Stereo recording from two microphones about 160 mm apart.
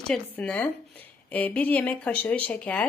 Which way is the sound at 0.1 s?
10° left (ahead or behind).